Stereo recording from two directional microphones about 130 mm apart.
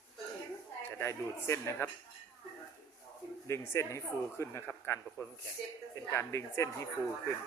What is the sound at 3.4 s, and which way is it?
A man's voice, 20° left (ahead or behind).